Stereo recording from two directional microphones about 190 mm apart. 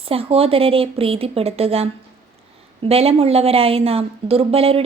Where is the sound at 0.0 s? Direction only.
30° right (ahead or behind).